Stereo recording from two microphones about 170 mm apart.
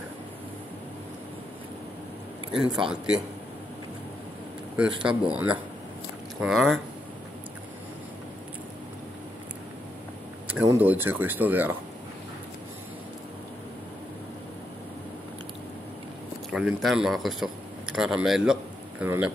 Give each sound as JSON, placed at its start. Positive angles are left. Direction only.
{"t": 2.5, "sound": "speech", "side_deg": -5}
{"t": 4.7, "sound": "speech", "side_deg": -5}
{"t": 10.5, "sound": "speech", "side_deg": -10}
{"t": 16.4, "sound": "a man's voice", "side_deg": 0}